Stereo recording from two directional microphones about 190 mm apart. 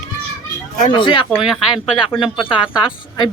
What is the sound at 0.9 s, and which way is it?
Speech, 25° left (ahead or behind).